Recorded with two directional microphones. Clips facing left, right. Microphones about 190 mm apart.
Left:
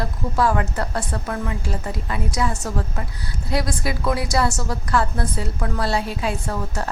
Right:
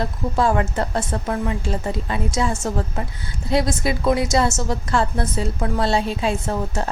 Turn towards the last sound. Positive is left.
turn(degrees=-25)  # may be behind; listen again after turning